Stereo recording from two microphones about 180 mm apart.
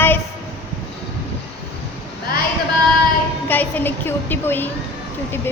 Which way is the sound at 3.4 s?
10° left (ahead or behind).